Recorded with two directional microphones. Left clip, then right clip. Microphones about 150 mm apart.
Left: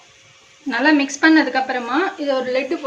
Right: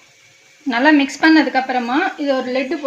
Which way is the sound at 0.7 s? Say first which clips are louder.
Right 3 dB; 45° right (ahead or behind).